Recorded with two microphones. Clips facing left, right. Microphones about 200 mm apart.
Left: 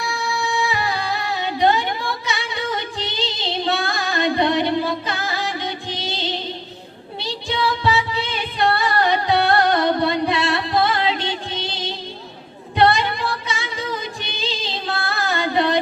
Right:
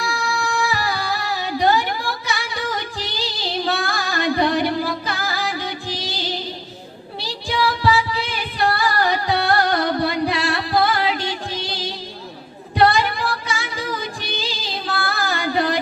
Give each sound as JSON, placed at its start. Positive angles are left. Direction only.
{"t": 0.1, "sound": "music", "side_deg": 20}
{"t": 1.6, "sound": "a sound", "side_deg": 25}
{"t": 2.3, "sound": "music", "side_deg": 25}
{"t": 7.5, "sound": "music", "side_deg": 30}